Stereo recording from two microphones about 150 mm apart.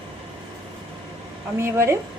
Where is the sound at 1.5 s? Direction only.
15° right (ahead or behind).